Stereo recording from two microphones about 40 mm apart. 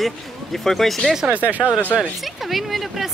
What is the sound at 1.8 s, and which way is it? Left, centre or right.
Speech, left.